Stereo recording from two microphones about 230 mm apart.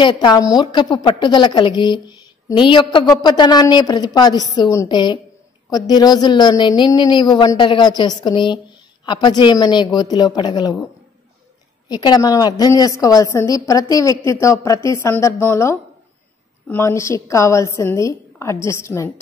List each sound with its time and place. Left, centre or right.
0.0 s a woman's voice: centre
11.9 s a woman's voice: centre